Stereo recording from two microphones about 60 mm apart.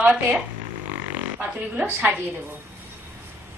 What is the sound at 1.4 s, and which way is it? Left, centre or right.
A woman's voice, right.